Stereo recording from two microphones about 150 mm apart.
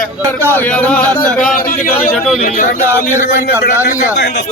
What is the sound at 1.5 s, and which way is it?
Speech, 65° left (ahead or behind).